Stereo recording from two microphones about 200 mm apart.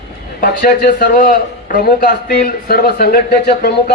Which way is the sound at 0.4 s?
45° left (ahead or behind).